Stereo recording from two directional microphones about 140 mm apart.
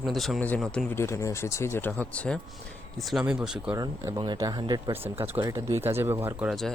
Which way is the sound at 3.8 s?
25° right (ahead or behind).